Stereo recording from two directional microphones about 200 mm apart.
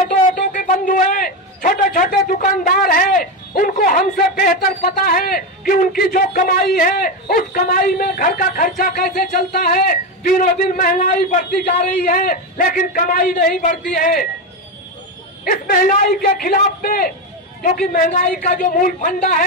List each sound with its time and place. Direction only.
0.3 s a man's voice: 45° left (ahead or behind)
15.4 s a man's voice: 45° left (ahead or behind)